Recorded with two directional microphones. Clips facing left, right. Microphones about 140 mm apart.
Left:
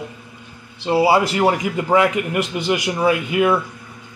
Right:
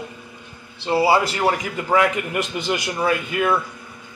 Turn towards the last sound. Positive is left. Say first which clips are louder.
# left 4 dB
turn(degrees=10)  # may be behind; listen again after turning